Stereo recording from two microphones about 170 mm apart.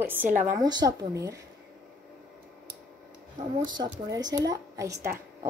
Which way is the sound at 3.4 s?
50° right (ahead or behind).